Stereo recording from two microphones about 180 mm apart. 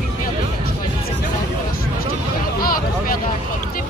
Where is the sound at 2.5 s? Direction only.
55° left (ahead or behind).